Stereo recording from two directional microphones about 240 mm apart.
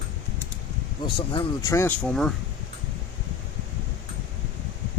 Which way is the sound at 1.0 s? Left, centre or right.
Centre.